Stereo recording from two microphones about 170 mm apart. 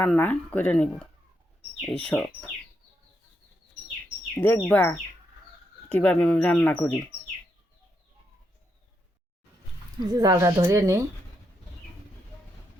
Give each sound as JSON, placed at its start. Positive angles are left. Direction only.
{"t": 0.0, "sound": "speech", "side_deg": 10}
{"t": 4.4, "sound": "speech", "side_deg": 15}
{"t": 10.0, "sound": "speech", "side_deg": -25}